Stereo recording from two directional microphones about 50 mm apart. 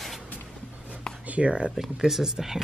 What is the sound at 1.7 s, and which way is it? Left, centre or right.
Speech, centre.